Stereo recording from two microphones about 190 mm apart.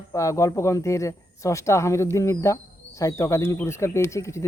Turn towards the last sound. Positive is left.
turn(degrees=15)  # may be behind; listen again after turning